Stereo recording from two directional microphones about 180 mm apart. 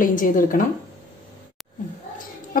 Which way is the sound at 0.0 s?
50° left (ahead or behind).